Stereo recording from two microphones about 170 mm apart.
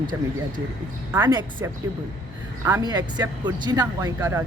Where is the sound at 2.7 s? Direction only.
20° right (ahead or behind).